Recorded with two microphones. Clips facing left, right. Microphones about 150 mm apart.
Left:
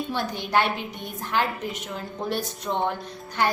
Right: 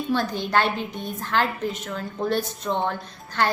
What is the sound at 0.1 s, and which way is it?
A woman's voice, 15° left (ahead or behind).